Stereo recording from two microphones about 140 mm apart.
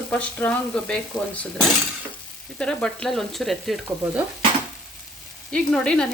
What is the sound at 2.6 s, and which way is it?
Speech, 5° left (ahead or behind).